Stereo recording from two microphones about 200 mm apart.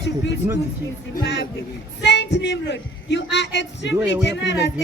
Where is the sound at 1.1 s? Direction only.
60° left (ahead or behind).